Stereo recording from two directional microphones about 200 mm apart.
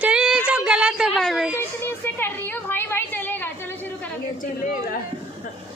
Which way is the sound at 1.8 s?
10° left (ahead or behind).